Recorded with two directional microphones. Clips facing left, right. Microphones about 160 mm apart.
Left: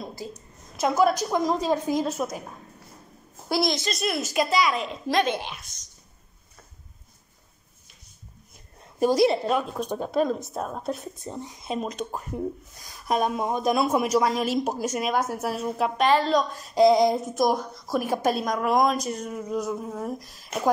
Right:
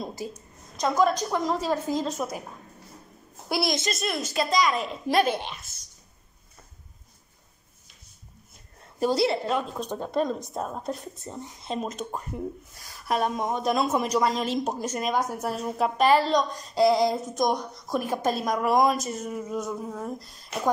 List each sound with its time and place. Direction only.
0.7 s a woman's voice: 10° left (ahead or behind)
2.1 s a woman's voice: 5° right (ahead or behind)
3.4 s a woman's voice: 10° right (ahead or behind)
3.9 s a woman's voice: 5° left (ahead or behind)
9.0 s a woman's voice: 15° left (ahead or behind)
11.8 s a woman's voice: centre (ahead or behind)
13.1 s a woman's voice: 10° left (ahead or behind)
16.7 s a woman's voice: 20° left (ahead or behind)
17.4 s a woman's voice: 5° left (ahead or behind)
18.3 s a woman's voice: centre (ahead or behind)